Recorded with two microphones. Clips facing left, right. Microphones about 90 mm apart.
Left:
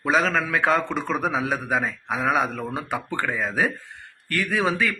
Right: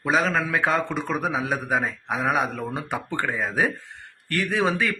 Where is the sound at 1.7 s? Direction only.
20° right (ahead or behind).